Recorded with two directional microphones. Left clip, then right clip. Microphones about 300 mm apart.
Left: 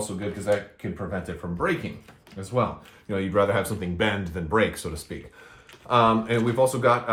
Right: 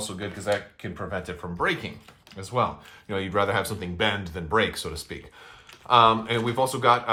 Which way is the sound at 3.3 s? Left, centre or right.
Centre.